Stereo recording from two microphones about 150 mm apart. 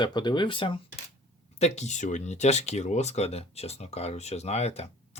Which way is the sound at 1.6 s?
45° left (ahead or behind).